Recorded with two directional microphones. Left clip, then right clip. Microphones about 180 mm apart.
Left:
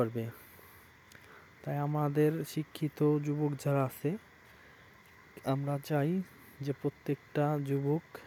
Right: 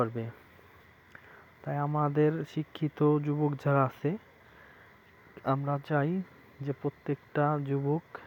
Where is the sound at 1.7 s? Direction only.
15° left (ahead or behind); by 4.2 s centre (ahead or behind).